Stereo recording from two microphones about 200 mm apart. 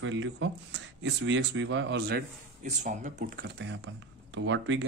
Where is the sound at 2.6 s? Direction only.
35° right (ahead or behind).